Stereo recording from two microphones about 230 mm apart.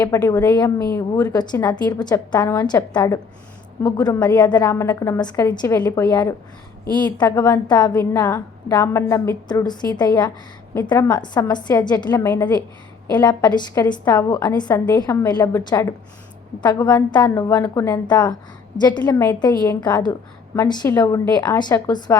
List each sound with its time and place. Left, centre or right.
0.0 s a woman's voice: centre